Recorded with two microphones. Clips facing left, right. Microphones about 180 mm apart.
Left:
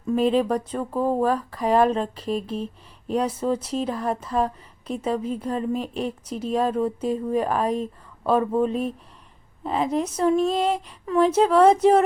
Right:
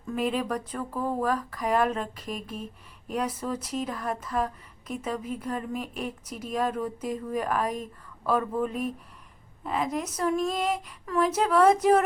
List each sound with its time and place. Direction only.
0.0 s speech: 25° left (ahead or behind)